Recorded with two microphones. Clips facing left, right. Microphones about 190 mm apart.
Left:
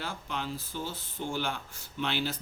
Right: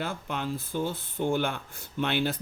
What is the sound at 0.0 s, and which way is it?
Speech, 50° right (ahead or behind).